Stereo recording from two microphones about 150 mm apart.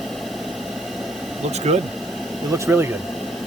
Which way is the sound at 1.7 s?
50° right (ahead or behind).